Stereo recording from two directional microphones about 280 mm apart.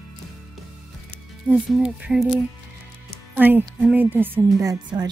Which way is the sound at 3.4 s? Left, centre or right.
Centre.